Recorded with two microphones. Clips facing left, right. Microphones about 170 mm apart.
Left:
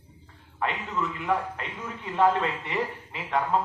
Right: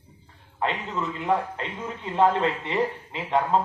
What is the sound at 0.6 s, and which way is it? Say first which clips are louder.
A man's voice: right 2 dB; 25° right (ahead or behind).